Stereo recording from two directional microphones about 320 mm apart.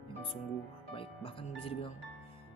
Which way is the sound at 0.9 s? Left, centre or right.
Centre.